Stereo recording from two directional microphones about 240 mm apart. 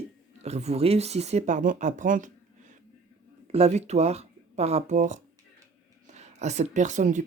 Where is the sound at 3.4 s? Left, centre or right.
Right.